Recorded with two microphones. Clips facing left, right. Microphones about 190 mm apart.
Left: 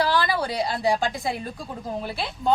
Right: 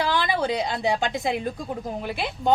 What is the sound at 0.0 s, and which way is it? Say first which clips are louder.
A woman's voice: left 1 dB; 20° right (ahead or behind).